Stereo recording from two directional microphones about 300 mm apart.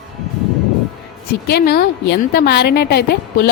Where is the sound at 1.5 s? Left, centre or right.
Left.